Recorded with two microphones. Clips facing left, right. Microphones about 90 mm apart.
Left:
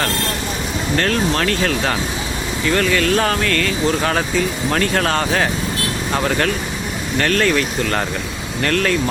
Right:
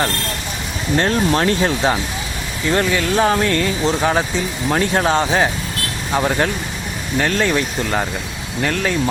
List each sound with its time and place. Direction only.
0.9 s speech: 25° right (ahead or behind)